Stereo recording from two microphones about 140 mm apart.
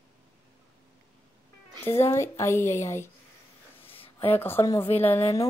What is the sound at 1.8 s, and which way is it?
A woman's voice, 15° left (ahead or behind).